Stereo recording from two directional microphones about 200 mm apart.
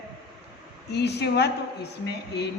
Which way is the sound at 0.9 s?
55° left (ahead or behind).